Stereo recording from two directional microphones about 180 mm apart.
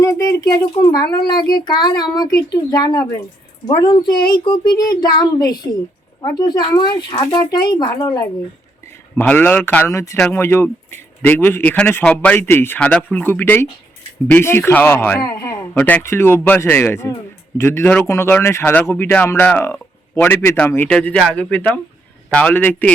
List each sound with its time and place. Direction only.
0.0 s speech: 15° left (ahead or behind)
9.1 s speech: 10° left (ahead or behind)